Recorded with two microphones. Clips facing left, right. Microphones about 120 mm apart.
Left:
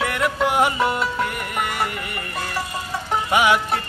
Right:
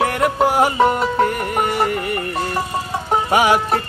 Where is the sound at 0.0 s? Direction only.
40° right (ahead or behind).